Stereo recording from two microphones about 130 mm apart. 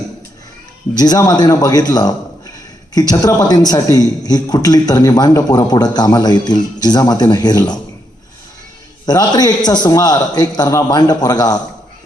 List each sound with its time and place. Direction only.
0.9 s a man's voice: 30° left (ahead or behind)
9.0 s a man's voice: 30° left (ahead or behind)